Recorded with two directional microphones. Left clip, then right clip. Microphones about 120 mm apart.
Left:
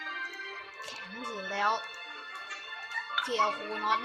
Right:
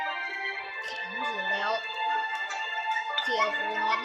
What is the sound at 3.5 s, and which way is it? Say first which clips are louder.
Speech: right 6 dB; 60° left (ahead or behind).